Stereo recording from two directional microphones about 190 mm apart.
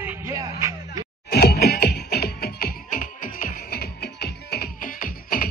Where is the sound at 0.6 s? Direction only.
20° right (ahead or behind).